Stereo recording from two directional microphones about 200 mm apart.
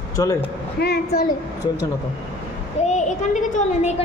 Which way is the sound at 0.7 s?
55° left (ahead or behind).